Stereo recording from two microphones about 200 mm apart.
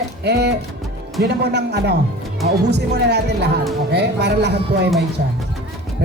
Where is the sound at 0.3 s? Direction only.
55° right (ahead or behind).